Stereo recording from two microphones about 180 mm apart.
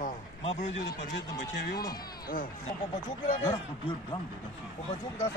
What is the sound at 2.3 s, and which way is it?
Speech, 50° left (ahead or behind).